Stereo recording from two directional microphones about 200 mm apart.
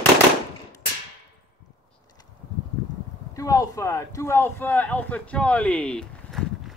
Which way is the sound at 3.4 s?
15° left (ahead or behind).